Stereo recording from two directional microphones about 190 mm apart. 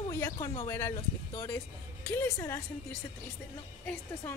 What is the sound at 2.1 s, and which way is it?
Speech, 15° left (ahead or behind).